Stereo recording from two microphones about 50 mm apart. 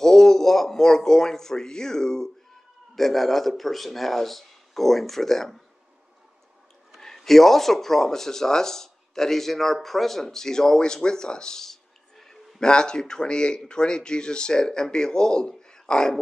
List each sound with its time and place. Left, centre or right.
0.0 s a man's voice: centre
7.0 s speech: centre